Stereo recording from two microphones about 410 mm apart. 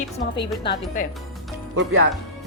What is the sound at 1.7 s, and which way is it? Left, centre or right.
Speech, right.